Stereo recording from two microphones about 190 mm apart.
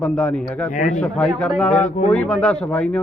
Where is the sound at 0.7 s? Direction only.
40° left (ahead or behind).